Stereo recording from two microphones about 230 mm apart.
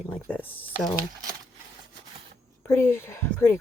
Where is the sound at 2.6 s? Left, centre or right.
Centre.